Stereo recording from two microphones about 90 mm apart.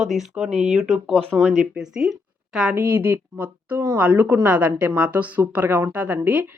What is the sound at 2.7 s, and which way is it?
A woman's voice, 20° right (ahead or behind).